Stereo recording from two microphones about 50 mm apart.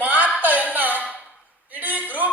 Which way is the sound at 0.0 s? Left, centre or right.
Right.